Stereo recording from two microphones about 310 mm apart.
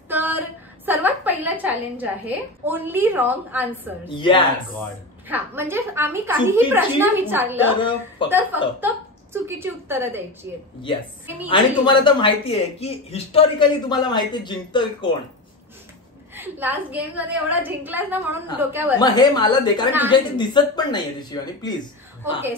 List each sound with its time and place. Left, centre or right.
0.1 s a woman's voice: centre
4.1 s speech: centre
5.3 s a woman's voice: centre
11.4 s speech: centre
16.3 s a woman's voice: centre
18.9 s speech: centre